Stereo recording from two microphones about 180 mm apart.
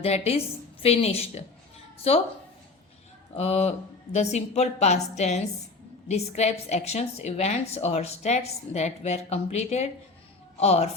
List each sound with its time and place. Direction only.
0.0 s a woman's voice: 35° left (ahead or behind)
3.3 s a woman's voice: 35° left (ahead or behind)